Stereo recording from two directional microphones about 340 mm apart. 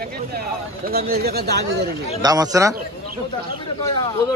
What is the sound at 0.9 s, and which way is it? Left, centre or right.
Speech, right.